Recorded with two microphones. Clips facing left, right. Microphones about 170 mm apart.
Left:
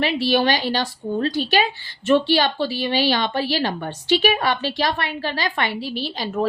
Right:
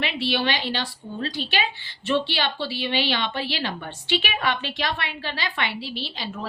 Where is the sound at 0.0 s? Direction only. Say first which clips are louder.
Left 6 dB; 40° left (ahead or behind).